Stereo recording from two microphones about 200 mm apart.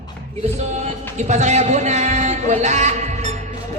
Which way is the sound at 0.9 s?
35° right (ahead or behind).